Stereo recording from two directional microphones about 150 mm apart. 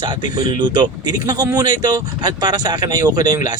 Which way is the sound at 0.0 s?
30° right (ahead or behind).